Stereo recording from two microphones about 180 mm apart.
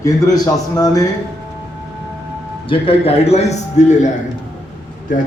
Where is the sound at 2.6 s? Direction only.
30° left (ahead or behind).